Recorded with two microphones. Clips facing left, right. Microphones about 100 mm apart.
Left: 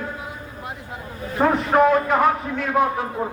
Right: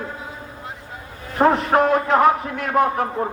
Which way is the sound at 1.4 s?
25° right (ahead or behind).